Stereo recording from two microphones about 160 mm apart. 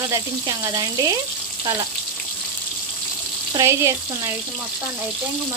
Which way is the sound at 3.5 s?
20° right (ahead or behind).